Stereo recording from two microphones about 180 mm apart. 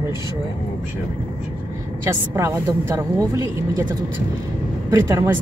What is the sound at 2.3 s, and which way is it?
Speech, 15° right (ahead or behind).